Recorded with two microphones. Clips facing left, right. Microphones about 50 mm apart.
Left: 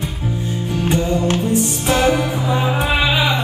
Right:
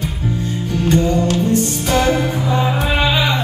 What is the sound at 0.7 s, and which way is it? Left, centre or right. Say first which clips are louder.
Music: right 3 dB; centre.